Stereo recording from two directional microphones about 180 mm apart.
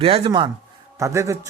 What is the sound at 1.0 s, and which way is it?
Speech, 15° right (ahead or behind).